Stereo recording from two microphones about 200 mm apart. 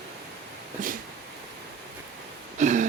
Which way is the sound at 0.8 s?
40° right (ahead or behind).